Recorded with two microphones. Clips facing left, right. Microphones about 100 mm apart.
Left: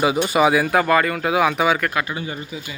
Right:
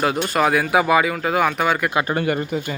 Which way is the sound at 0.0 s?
5° left (ahead or behind).